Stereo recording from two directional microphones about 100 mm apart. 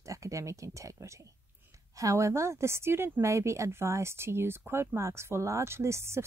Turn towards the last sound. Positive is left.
turn(degrees=-25)  # may be behind; listen again after turning